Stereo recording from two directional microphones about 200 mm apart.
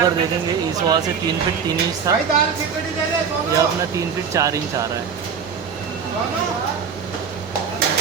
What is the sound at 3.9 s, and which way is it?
Speech, 15° right (ahead or behind).